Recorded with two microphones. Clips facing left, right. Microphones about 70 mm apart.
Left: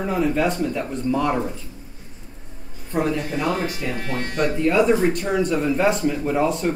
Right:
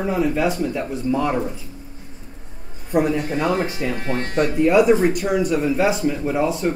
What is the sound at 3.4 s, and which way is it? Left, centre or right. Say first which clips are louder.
Speech: right 2 dB; right.